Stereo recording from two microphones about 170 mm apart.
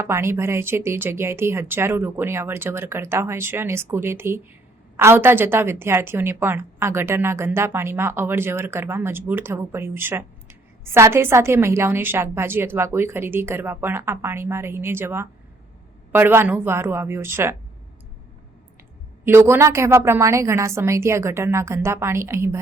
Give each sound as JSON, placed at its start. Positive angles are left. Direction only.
{"t": 0.0, "sound": "a woman's voice", "side_deg": -15}
{"t": 19.2, "sound": "a woman's voice", "side_deg": -15}